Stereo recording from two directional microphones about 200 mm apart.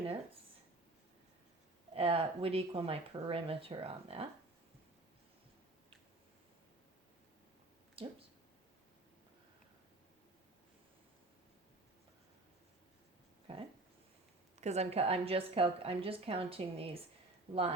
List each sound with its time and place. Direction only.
2.0 s a woman's voice: 30° right (ahead or behind)
8.0 s speech: 30° right (ahead or behind)
13.5 s a woman's voice: 30° right (ahead or behind)